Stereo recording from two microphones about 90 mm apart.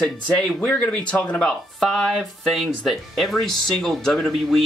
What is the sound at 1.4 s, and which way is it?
Speech, 5° left (ahead or behind).